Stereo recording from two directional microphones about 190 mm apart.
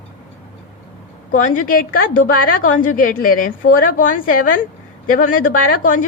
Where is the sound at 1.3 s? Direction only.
45° left (ahead or behind).